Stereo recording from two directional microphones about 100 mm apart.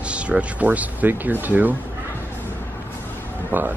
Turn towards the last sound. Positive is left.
turn(degrees=-20)  # may be behind; listen again after turning